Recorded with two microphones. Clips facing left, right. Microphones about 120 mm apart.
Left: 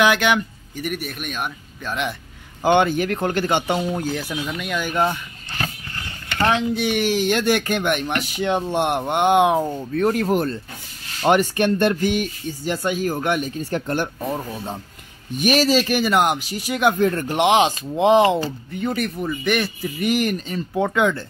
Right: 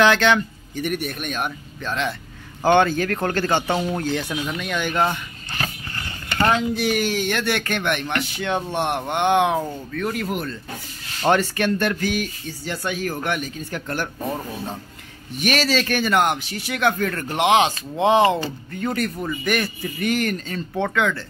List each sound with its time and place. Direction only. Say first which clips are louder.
0.0 s a man's voice: right 1 dB; 10° left (ahead or behind)
2.6 s a man's voice: even; 15° left (ahead or behind)
6.4 s a man's voice: even; centre (ahead or behind)
7.2 s speech: left 4 dB; 20° left (ahead or behind)
9.9 s speech: left 7 dB; 40° left (ahead or behind)
11.2 s speech: left 2 dB; 15° left (ahead or behind)
15.3 s speech: left 4 dB; 15° left (ahead or behind)
17.9 s a man's voice: left 2 dB; centre (ahead or behind)